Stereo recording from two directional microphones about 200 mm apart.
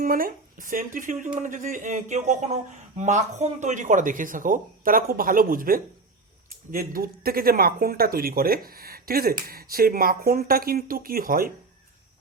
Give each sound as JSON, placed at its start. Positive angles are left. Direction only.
{"t": 0.0, "sound": "speech", "side_deg": -45}